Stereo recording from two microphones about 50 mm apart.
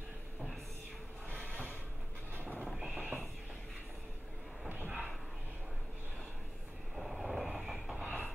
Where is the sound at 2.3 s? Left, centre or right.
Right.